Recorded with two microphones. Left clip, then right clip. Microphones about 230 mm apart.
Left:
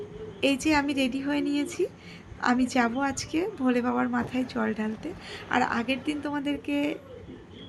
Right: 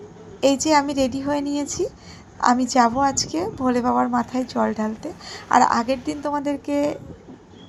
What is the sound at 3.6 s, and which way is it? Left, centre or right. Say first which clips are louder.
A woman's voice: right 8 dB; centre.